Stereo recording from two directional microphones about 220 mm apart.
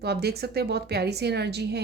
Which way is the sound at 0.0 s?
45° right (ahead or behind).